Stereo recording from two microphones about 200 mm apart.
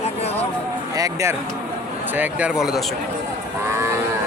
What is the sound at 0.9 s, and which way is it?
Speech, 15° right (ahead or behind).